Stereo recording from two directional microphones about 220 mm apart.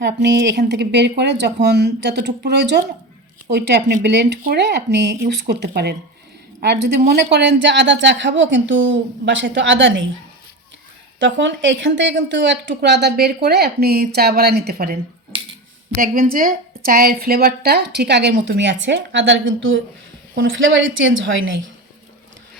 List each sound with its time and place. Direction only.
0.0 s a woman's voice: 50° right (ahead or behind)
11.2 s a woman's voice: 55° right (ahead or behind)
16.0 s a woman's voice: 40° right (ahead or behind); by 21.6 s 60° right (ahead or behind)